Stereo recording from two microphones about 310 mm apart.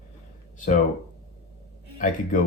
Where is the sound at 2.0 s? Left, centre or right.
Left.